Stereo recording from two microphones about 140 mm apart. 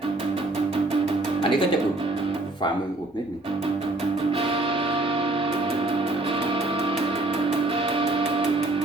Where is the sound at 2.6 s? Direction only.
30° left (ahead or behind).